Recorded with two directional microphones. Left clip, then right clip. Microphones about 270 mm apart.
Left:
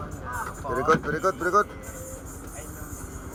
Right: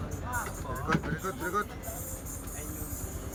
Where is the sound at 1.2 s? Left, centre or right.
Centre.